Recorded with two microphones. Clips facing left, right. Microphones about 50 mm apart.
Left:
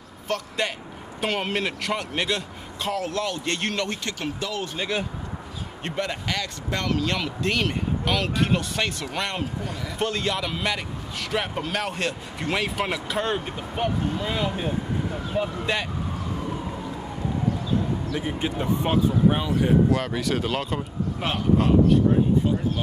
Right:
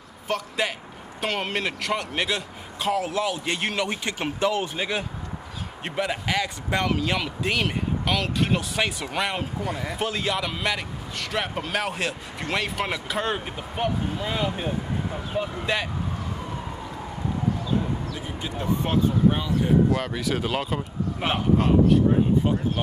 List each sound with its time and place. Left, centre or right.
0.3 s a man's voice: centre
4.2 s speech: right
4.7 s speech: centre
9.7 s speech: right
9.9 s a man's voice: centre
18.1 s speech: left
18.6 s speech: centre
19.9 s a man's voice: centre